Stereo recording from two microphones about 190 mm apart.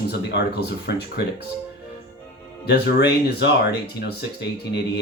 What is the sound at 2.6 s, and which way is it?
Speech, 60° left (ahead or behind).